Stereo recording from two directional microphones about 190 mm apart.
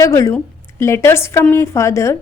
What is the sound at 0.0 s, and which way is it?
A woman's voice, 15° left (ahead or behind).